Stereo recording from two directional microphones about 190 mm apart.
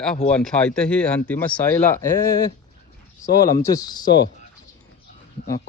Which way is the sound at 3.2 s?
20° left (ahead or behind).